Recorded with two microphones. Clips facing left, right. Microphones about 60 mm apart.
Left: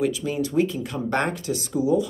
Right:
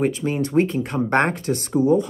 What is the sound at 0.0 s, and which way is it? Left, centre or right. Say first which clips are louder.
Speech: right 2 dB; right.